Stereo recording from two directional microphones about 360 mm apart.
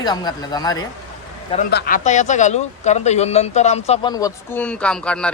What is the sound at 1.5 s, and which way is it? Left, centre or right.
A man's voice, left.